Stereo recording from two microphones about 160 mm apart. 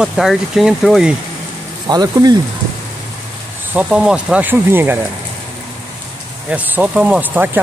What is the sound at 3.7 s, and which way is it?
Speech, 5° right (ahead or behind).